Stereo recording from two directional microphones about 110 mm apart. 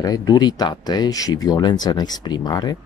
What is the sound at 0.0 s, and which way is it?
Speech, 35° left (ahead or behind).